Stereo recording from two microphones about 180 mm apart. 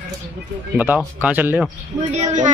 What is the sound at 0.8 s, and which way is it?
Speech, 10° right (ahead or behind).